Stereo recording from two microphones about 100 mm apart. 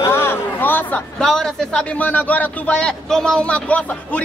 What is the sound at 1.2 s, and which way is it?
A man's voice, 5° left (ahead or behind).